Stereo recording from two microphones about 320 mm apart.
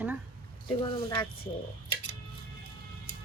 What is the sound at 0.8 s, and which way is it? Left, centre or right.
Speech, centre.